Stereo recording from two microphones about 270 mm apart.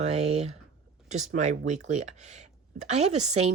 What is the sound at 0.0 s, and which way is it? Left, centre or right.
Speech, right.